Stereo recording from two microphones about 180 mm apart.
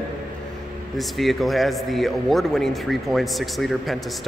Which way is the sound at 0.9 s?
Centre (ahead or behind).